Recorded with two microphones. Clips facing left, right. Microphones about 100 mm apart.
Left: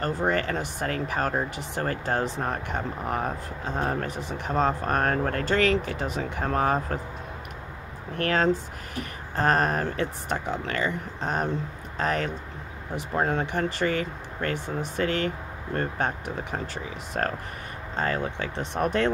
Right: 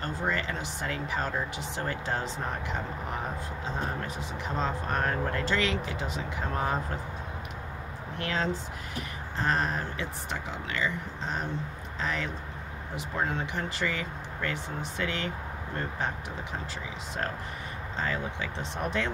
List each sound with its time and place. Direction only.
0.3 s speech: 60° left (ahead or behind)
8.2 s speech: 55° left (ahead or behind)
17.1 s speech: 65° left (ahead or behind)
17.9 s speech: 50° left (ahead or behind)